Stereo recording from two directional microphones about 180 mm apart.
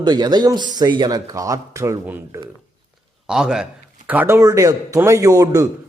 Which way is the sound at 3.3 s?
5° right (ahead or behind).